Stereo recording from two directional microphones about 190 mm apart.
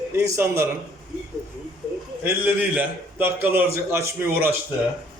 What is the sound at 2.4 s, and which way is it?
A man's voice, 10° right (ahead or behind).